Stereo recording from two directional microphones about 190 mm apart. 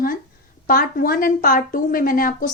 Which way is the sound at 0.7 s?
50° left (ahead or behind).